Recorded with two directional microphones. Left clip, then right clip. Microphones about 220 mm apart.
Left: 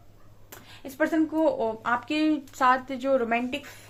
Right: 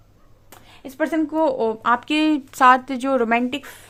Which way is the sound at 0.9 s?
45° right (ahead or behind).